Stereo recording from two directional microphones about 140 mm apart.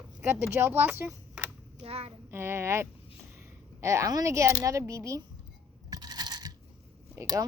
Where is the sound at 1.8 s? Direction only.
45° right (ahead or behind).